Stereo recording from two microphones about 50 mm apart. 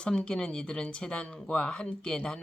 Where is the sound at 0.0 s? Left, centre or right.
Centre.